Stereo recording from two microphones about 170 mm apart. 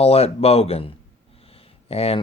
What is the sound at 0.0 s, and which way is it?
Speech, 35° left (ahead or behind).